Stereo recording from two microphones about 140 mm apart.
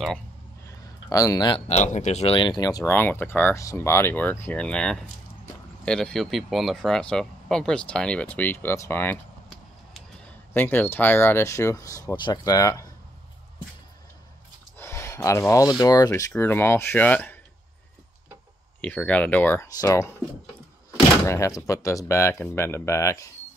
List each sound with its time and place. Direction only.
0.7 s a sound: 25° left (ahead or behind)
1.7 s speech: 55° left (ahead or behind)
2.3 s speech: 35° left (ahead or behind)
2.9 s speech: 15° left (ahead or behind)
10.5 s speech: 15° left (ahead or behind)
14.8 s a sound: 20° left (ahead or behind)
15.8 s speech: 25° left (ahead or behind)
16.3 s speech: 15° left (ahead or behind)
18.8 s speech: 10° left (ahead or behind); by 20.1 s 25° left (ahead or behind)
21.3 s speech: 20° left (ahead or behind)